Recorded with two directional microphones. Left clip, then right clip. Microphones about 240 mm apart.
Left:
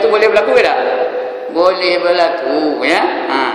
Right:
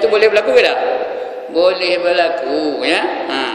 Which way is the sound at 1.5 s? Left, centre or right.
Centre.